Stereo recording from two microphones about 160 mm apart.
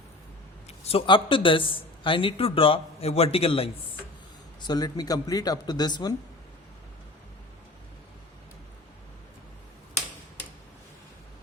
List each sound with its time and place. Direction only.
0.7 s a man's voice: 40° left (ahead or behind)
4.6 s speech: 25° left (ahead or behind)